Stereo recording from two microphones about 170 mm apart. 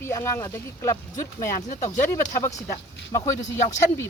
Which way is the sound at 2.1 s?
15° left (ahead or behind).